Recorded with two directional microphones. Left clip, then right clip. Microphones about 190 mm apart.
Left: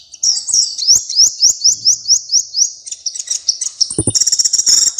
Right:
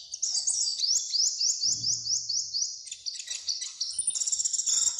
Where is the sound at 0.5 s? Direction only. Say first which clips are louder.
Left 17 dB; 30° left (ahead or behind).